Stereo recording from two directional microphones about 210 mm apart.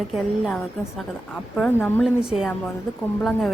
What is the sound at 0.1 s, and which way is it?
A woman's voice, centre (ahead or behind).